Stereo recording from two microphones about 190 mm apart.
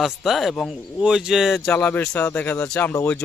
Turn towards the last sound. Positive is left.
turn(degrees=10)  # may be behind; listen again after turning